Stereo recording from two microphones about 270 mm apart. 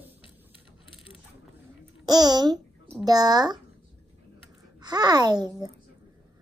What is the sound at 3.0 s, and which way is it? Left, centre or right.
Speech, centre.